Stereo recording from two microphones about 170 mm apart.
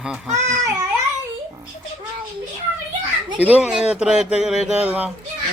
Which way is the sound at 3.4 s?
10° right (ahead or behind).